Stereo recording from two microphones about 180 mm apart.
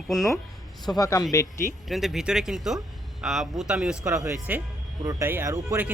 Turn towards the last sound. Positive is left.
turn(degrees=-15)  # may be behind; listen again after turning